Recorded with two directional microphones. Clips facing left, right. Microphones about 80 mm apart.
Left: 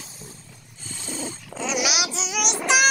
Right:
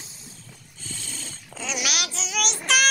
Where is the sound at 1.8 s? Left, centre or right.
Centre.